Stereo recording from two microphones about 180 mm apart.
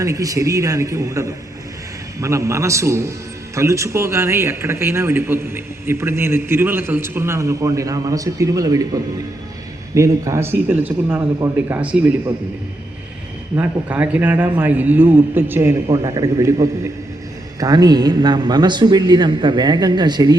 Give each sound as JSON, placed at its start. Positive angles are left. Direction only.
{"t": 0.0, "sound": "speech", "side_deg": -20}
{"t": 13.6, "sound": "speech", "side_deg": -10}
{"t": 15.9, "sound": "a man's voice", "side_deg": -25}